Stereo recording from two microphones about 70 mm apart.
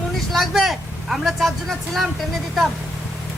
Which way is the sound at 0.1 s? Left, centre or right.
Centre.